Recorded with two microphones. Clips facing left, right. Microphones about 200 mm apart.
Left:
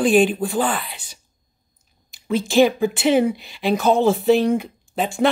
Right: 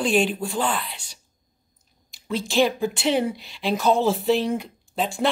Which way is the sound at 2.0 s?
50° left (ahead or behind).